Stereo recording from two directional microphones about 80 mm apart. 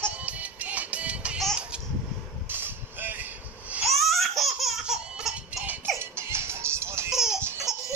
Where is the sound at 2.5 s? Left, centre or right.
Right.